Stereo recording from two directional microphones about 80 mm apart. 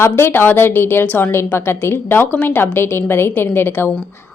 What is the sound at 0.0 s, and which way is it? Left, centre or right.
A woman's voice, left.